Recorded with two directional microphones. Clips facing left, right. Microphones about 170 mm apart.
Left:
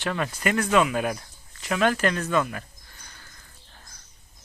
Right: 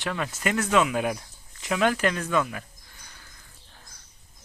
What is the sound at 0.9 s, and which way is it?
Speech, 15° right (ahead or behind).